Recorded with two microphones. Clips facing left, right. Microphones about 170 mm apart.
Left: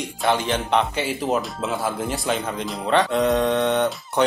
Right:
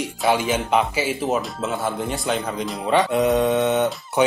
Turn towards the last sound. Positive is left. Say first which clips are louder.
# right 1 dB
turn(degrees=-5)  # may be behind; listen again after turning